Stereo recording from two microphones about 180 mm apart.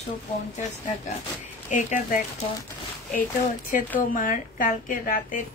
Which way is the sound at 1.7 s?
45° left (ahead or behind).